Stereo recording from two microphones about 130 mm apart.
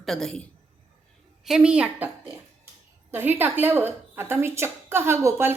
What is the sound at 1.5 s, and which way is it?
Speech, 5° right (ahead or behind).